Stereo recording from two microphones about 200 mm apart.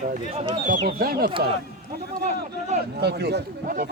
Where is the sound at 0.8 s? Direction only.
50° right (ahead or behind).